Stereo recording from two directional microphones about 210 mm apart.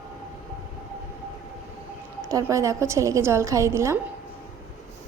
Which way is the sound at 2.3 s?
15° right (ahead or behind).